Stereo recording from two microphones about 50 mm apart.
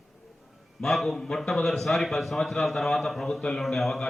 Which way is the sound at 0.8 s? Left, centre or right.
Centre.